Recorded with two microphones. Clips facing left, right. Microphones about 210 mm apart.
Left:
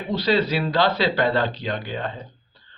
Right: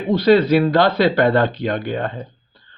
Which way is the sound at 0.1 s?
50° right (ahead or behind).